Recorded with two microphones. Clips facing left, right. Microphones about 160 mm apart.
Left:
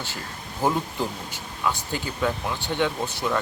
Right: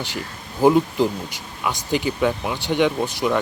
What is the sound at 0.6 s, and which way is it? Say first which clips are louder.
Speech: right 9 dB; 15° right (ahead or behind).